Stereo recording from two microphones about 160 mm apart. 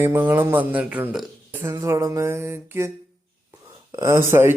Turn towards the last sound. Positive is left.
turn(degrees=-15)  # may be behind; listen again after turning